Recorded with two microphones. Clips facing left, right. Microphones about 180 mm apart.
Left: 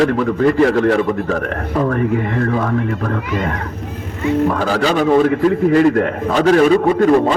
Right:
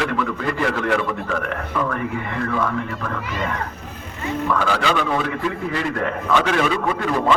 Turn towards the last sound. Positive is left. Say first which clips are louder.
# left 7 dB
turn(degrees=40)  # may be behind; listen again after turning